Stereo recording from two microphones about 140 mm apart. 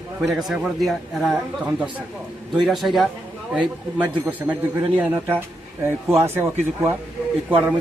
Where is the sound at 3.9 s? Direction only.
10° right (ahead or behind).